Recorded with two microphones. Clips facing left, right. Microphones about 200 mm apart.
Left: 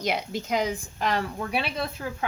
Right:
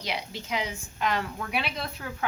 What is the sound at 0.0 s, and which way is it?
A woman's voice, 45° left (ahead or behind).